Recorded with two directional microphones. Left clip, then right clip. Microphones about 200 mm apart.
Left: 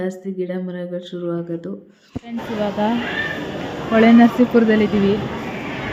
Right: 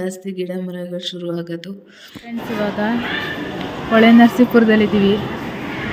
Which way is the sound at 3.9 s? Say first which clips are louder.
Right 2 dB; centre (ahead or behind).